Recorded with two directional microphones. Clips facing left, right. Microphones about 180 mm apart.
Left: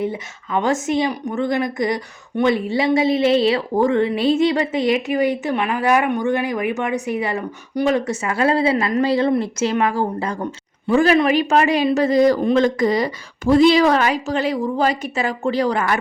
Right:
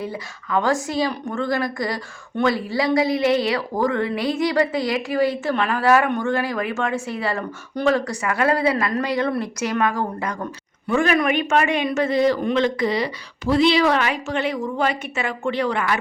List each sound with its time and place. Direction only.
0.0 s speech: 20° left (ahead or behind); by 16.0 s 40° left (ahead or behind)